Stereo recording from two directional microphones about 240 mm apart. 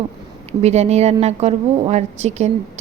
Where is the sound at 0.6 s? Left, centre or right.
Right.